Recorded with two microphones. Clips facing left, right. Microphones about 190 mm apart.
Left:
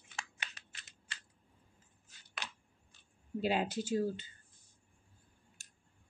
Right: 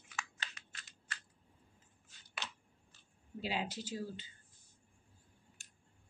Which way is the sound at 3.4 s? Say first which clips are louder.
Left 6 dB; 50° left (ahead or behind).